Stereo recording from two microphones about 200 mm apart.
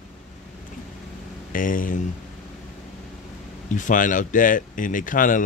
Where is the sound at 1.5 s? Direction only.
45° left (ahead or behind).